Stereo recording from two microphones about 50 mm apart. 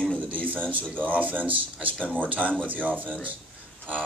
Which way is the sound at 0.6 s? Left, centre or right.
Left.